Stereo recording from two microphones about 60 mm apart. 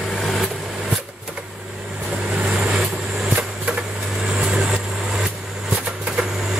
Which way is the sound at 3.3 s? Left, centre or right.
Right.